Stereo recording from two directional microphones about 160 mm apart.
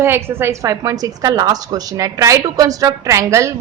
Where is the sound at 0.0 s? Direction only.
15° right (ahead or behind).